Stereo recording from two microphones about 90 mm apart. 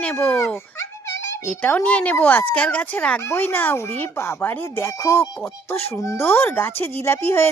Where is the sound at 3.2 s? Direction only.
30° left (ahead or behind).